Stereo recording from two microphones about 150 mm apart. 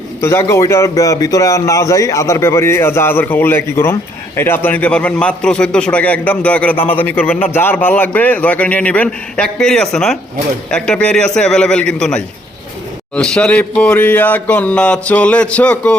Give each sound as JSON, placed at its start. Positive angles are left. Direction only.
{"t": 0.2, "sound": "a man's voice", "side_deg": 20}